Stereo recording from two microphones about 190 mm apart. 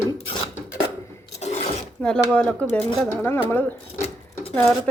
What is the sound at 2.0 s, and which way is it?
Speech, 5° left (ahead or behind).